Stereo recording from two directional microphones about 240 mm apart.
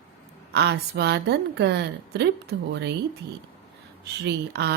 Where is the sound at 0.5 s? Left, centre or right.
Right.